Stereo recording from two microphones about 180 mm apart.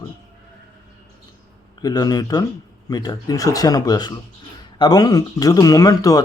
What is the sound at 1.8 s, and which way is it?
Speech, 20° left (ahead or behind).